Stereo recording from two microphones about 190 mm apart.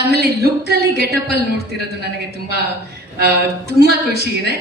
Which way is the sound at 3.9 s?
60° left (ahead or behind).